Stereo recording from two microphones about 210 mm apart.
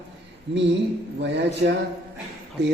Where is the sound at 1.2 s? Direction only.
55° right (ahead or behind).